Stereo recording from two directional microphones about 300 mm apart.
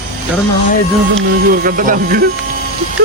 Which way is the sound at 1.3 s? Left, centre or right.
Right.